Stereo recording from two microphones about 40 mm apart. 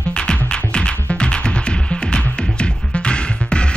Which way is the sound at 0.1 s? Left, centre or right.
Left.